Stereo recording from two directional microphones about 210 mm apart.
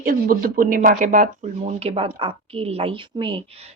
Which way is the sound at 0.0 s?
40° right (ahead or behind).